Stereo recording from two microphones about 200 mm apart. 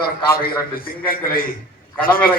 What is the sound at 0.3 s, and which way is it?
A man's voice, 45° left (ahead or behind).